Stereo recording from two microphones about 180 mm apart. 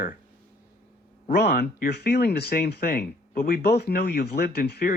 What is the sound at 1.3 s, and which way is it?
Speech, 60° left (ahead or behind).